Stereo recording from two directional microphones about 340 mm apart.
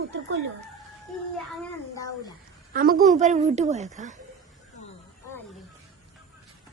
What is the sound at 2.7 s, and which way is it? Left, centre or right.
A woman's voice, right.